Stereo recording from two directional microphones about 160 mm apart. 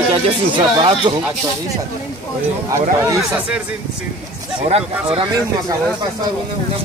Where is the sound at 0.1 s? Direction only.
30° right (ahead or behind).